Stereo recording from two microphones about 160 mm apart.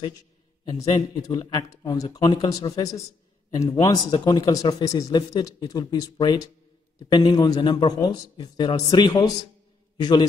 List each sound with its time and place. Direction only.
0.7 s a man's voice: 25° left (ahead or behind)